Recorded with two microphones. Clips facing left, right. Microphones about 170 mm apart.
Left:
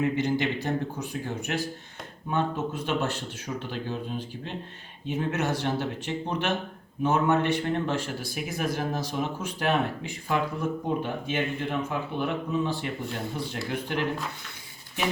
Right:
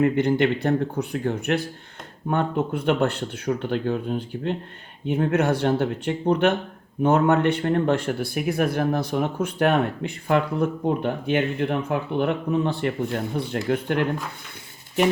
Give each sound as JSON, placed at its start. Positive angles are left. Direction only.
{"t": 0.0, "sound": "speech", "side_deg": -55}